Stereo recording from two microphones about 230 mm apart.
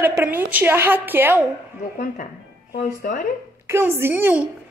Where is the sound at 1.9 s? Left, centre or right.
Left.